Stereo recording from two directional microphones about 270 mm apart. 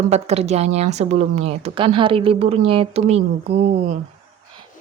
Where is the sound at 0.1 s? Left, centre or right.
Right.